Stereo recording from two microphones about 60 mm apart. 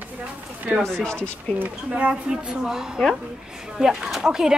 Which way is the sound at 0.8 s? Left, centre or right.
Centre.